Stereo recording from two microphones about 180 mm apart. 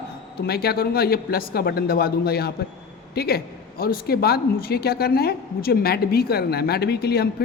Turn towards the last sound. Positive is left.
turn(degrees=60)  # may be behind; listen again after turning